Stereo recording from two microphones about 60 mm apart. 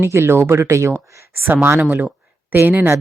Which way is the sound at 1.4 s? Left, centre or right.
Right.